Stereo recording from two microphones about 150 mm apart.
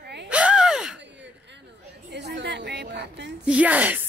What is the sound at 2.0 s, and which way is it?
Chatter, 90° right.